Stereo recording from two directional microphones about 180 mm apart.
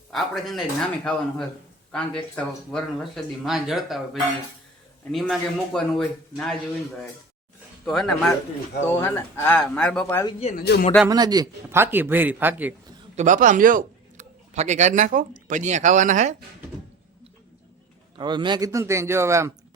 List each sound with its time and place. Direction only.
0.1 s speech: centre (ahead or behind)
7.9 s speech: centre (ahead or behind)
8.9 s speech: 15° left (ahead or behind)
10.7 s a man's voice: 65° left (ahead or behind)
11.1 s a man's voice: 20° right (ahead or behind)
13.1 s a man's voice: 45° right (ahead or behind)
18.2 s a man's voice: 25° right (ahead or behind)